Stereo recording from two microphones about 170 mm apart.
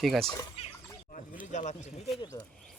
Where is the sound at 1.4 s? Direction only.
45° left (ahead or behind).